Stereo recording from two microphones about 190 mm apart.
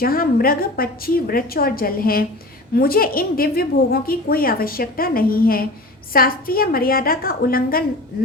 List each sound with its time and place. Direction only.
0.0 s a woman's voice: 50° left (ahead or behind)